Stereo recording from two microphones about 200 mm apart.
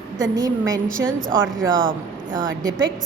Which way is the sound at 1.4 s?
70° right (ahead or behind).